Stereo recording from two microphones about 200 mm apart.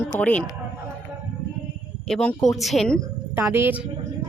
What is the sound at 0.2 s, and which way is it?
Speech, 5° left (ahead or behind).